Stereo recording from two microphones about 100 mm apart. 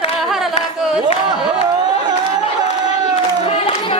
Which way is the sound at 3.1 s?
85° left.